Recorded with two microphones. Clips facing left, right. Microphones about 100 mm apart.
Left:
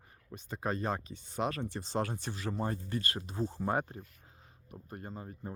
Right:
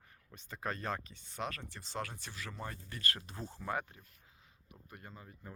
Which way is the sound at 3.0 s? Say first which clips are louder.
Left 6 dB; 20° left (ahead or behind).